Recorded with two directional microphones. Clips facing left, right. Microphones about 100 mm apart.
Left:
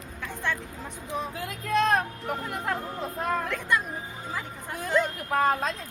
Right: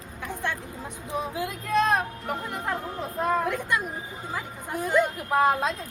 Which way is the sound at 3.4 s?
15° right (ahead or behind).